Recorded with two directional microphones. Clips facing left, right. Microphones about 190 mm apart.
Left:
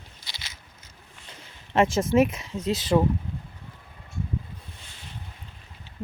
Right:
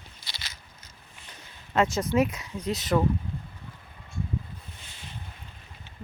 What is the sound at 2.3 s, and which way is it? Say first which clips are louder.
Speech: left 3 dB; 25° left (ahead or behind).